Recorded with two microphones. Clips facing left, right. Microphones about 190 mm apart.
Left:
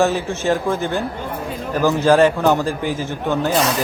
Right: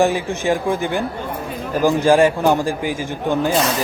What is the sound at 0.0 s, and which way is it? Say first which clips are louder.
Speech: right 1 dB; 15° right (ahead or behind).